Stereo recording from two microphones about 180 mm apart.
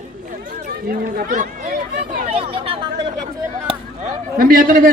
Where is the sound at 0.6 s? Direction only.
55° right (ahead or behind).